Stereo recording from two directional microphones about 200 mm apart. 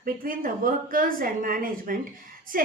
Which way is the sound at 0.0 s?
45° right (ahead or behind).